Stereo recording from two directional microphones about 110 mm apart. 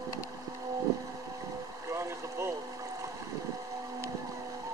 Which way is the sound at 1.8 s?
25° right (ahead or behind).